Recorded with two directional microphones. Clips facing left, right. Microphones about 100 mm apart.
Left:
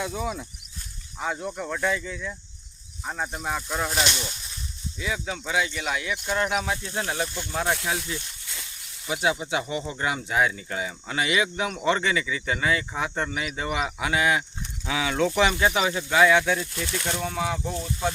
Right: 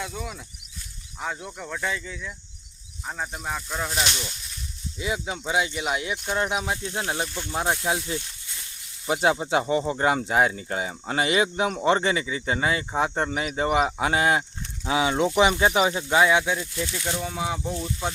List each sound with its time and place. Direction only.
0.0 s speech: 5° left (ahead or behind)
4.9 s speech: 20° right (ahead or behind)
16.7 s speech: 55° left (ahead or behind)
17.2 s speech: 15° right (ahead or behind)